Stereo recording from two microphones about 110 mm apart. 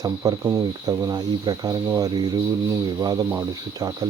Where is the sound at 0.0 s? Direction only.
35° right (ahead or behind).